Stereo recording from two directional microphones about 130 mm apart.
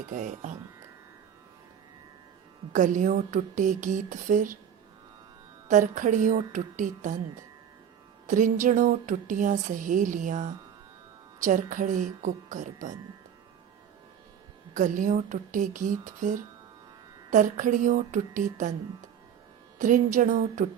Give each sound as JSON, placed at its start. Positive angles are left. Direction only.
{"t": 0.1, "sound": "speech", "side_deg": -70}
{"t": 2.7, "sound": "speech", "side_deg": -75}
{"t": 5.6, "sound": "a woman's voice", "side_deg": -85}
{"t": 8.3, "sound": "a woman's voice", "side_deg": -85}
{"t": 14.7, "sound": "a woman's voice", "side_deg": -75}
{"t": 19.8, "sound": "a woman's voice", "side_deg": -85}